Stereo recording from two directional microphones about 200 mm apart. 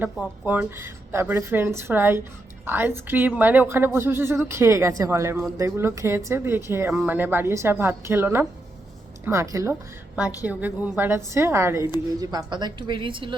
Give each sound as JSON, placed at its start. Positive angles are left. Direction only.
{"t": 0.0, "sound": "a woman's voice", "side_deg": -10}